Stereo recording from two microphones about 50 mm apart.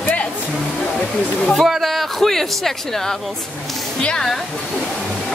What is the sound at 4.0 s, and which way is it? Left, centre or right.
Speech, centre.